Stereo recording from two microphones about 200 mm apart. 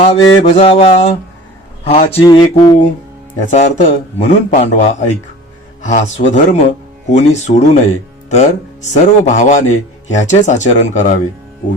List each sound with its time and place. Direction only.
0.0 s speech: 35° left (ahead or behind)
2.1 s a sound: 20° left (ahead or behind)
3.3 s speech: 35° left (ahead or behind)